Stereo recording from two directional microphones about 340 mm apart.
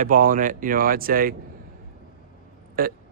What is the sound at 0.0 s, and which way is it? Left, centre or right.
Speech, right.